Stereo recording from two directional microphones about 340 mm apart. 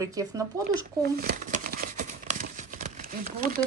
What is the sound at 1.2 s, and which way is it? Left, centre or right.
Crumpling, right.